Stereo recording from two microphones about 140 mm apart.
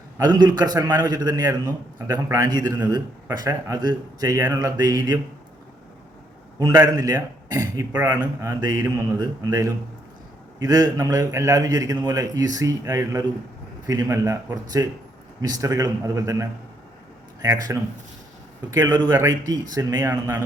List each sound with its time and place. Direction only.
0.2 s a man's voice: 30° right (ahead or behind)
6.6 s a man's voice: 25° right (ahead or behind)
20.1 s a man's voice: 15° right (ahead or behind)